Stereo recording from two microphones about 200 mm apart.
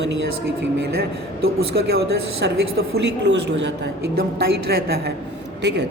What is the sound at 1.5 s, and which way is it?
A woman's voice, 50° right (ahead or behind).